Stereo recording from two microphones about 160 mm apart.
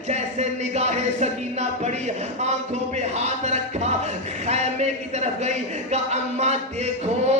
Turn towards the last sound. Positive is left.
turn(degrees=-45)  # may be behind; listen again after turning